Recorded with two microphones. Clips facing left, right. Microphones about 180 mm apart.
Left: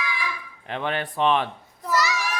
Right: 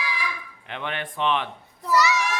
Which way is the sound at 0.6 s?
40° left (ahead or behind).